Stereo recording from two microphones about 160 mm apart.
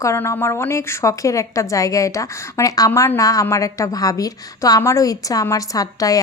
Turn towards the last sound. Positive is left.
turn(degrees=20)  # may be behind; listen again after turning